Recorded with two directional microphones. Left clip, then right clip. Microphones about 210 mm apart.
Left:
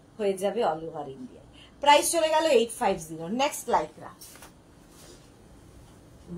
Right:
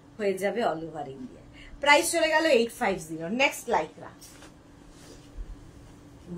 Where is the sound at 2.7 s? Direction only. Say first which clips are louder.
Left 1 dB; 15° right (ahead or behind).